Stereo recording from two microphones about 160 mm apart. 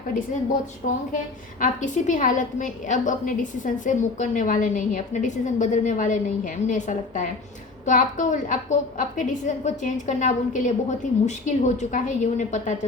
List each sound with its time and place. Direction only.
1.1 s a woman's voice: 55° left (ahead or behind)